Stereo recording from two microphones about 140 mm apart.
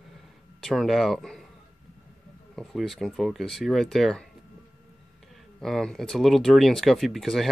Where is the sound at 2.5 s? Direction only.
Centre (ahead or behind).